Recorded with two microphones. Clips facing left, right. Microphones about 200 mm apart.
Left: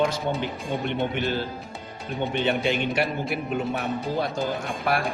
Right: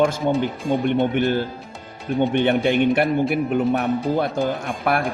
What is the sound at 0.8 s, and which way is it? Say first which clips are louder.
Speech: right 7 dB; 50° right (ahead or behind).